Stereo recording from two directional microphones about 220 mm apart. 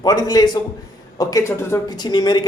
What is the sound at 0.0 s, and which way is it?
Speech, 15° left (ahead or behind).